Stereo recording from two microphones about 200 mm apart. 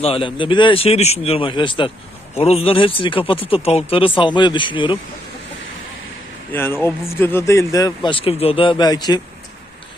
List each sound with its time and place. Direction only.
0.0 s speech: 25° left (ahead or behind)
6.5 s speech: 10° left (ahead or behind)